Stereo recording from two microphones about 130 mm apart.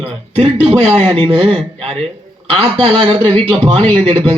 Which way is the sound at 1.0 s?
45° right (ahead or behind).